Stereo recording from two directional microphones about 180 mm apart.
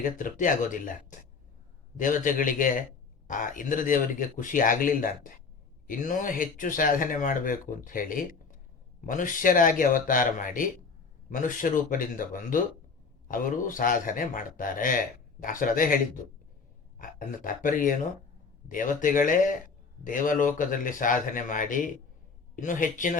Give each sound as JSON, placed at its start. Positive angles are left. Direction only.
{"t": 0.0, "sound": "speech", "side_deg": 50}
{"t": 2.0, "sound": "speech", "side_deg": 45}
{"t": 17.0, "sound": "speech", "side_deg": 50}